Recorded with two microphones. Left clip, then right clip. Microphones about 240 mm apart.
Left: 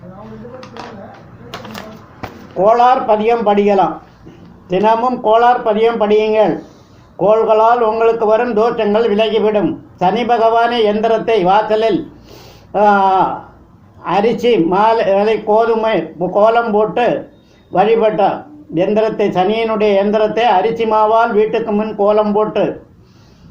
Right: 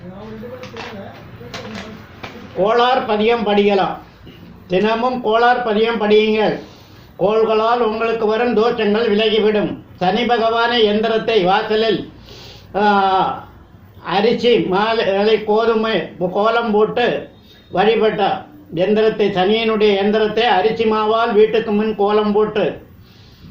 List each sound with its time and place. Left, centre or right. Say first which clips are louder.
2.6 s a man's voice: left 5 dB; left
5.2 s a man's voice: left 3 dB; left
14.0 s a man's voice: left 2 dB; left